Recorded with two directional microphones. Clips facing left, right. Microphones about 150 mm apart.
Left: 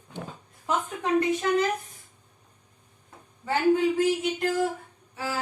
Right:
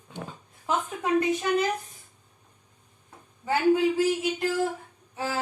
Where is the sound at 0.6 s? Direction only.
10° right (ahead or behind).